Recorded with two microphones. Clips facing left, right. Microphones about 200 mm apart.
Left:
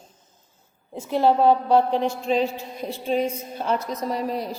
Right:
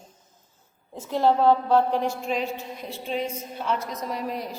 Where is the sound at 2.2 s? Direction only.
30° left (ahead or behind).